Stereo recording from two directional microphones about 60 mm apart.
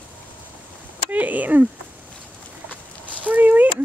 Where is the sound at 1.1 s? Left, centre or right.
Right.